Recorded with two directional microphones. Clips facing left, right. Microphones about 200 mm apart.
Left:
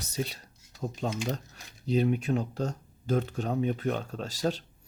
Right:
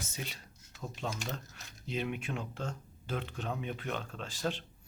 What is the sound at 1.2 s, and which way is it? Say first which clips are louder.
Speech: left 7 dB; 40° left (ahead or behind).